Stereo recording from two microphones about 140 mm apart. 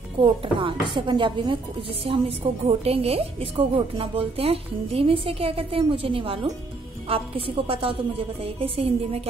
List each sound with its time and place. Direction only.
0.2 s speech: 35° right (ahead or behind)